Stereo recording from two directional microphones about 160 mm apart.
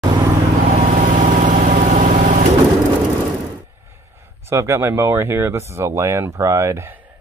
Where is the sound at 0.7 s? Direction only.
55° right (ahead or behind).